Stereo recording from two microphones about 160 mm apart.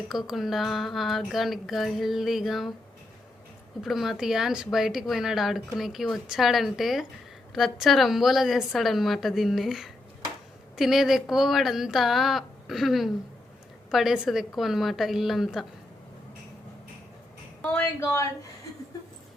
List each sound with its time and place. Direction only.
0.1 s speech: centre (ahead or behind)
3.8 s speech: centre (ahead or behind)
17.6 s a woman's voice: 15° left (ahead or behind)